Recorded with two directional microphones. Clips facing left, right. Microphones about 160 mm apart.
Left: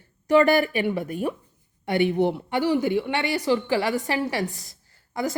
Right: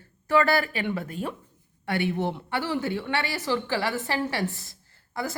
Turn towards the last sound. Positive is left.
turn(degrees=20)  # may be behind; listen again after turning